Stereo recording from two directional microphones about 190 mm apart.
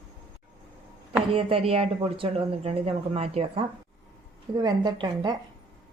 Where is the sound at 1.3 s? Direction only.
30° right (ahead or behind).